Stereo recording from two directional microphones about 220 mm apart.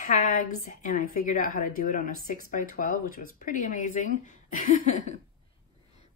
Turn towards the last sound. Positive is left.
turn(degrees=35)  # may be behind; listen again after turning